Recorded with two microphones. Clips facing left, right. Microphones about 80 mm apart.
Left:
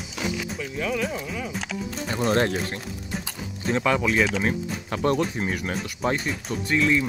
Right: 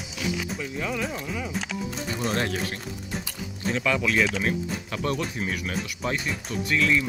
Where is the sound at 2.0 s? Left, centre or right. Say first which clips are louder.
Left 6 dB; left.